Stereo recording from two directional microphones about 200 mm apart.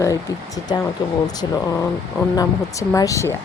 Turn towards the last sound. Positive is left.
turn(degrees=15)  # may be behind; listen again after turning